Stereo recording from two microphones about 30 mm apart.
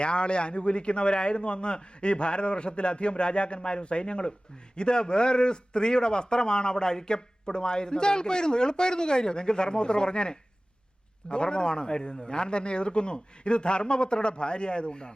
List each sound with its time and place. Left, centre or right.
0.0 s a man's voice: left